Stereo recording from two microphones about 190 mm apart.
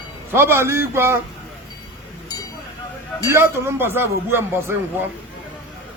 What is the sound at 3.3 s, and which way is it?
Speech, 15° right (ahead or behind).